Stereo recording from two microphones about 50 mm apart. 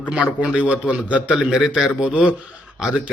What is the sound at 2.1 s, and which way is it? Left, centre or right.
Speech, right.